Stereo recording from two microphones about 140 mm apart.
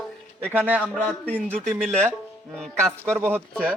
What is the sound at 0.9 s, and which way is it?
Speech, 10° left (ahead or behind).